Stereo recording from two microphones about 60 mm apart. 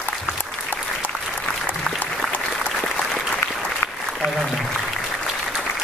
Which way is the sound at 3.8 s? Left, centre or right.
Left.